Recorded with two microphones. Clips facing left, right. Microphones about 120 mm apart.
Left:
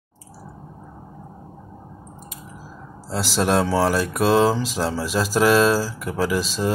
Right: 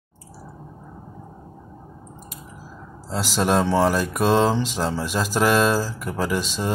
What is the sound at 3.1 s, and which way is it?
Speech, centre (ahead or behind).